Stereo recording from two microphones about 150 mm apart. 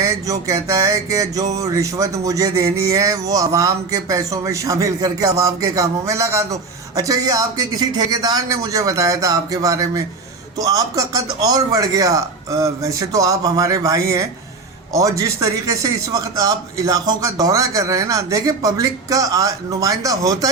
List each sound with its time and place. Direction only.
0.0 s speech: 20° right (ahead or behind)